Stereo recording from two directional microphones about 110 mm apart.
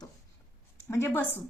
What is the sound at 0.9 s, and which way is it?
Speech, 20° left (ahead or behind).